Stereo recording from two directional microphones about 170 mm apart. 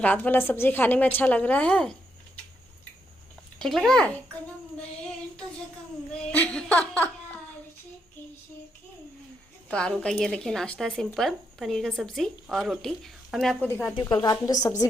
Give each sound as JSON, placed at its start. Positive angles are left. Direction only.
{"t": 0.0, "sound": "a woman's voice", "side_deg": 10}
{"t": 3.6, "sound": "speech", "side_deg": 0}
{"t": 6.3, "sound": "a sound", "side_deg": 10}
{"t": 9.6, "sound": "a woman's voice", "side_deg": 5}
{"t": 14.0, "sound": "a woman's voice", "side_deg": 20}